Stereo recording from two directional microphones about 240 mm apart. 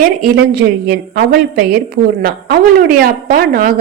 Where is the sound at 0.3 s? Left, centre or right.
Right.